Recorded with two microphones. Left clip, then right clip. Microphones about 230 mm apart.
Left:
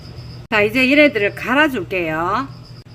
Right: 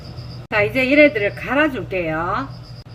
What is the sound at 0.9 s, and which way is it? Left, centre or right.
A woman's voice, left.